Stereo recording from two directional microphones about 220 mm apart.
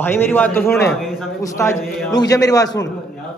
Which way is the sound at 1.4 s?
15° left (ahead or behind).